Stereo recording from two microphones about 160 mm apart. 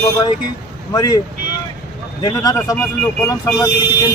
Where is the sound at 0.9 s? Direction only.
25° left (ahead or behind).